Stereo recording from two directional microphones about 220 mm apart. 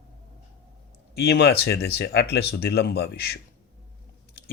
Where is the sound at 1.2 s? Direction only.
45° left (ahead or behind).